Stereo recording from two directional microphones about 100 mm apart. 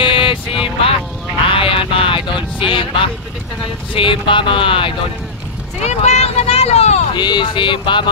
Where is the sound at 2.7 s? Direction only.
55° left (ahead or behind).